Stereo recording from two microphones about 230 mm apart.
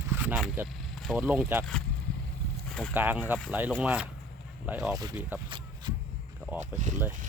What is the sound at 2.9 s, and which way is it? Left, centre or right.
Speech, centre.